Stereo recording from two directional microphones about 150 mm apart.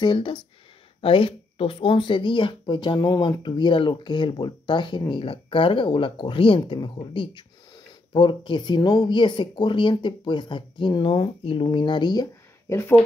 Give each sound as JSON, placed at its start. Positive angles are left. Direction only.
{"t": 0.0, "sound": "speech", "side_deg": 30}